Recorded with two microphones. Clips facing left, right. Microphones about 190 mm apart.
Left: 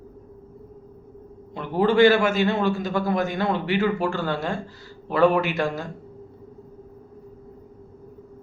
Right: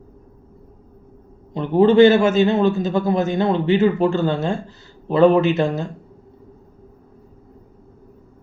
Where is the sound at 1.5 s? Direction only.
20° right (ahead or behind).